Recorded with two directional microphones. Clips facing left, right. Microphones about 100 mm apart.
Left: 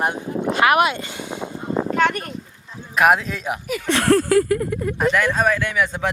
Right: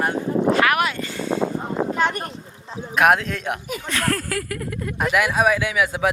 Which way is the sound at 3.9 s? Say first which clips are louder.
Left 9 dB; 25° left (ahead or behind).